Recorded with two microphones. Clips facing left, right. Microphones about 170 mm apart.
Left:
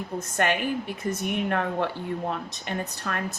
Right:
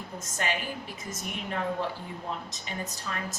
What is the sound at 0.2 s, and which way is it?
A woman's voice, 60° left (ahead or behind).